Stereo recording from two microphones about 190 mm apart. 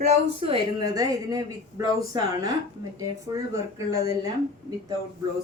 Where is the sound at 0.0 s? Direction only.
30° right (ahead or behind).